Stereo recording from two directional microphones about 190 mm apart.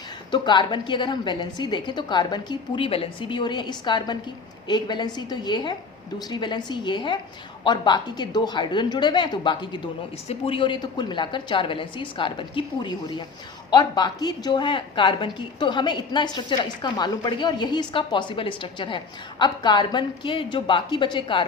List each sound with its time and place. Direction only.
0.3 s a woman's voice: 25° left (ahead or behind)